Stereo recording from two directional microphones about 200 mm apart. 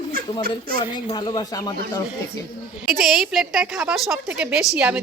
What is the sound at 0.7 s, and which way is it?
Speech, 20° left (ahead or behind).